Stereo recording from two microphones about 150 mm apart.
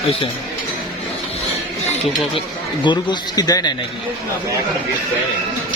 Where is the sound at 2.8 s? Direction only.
30° left (ahead or behind).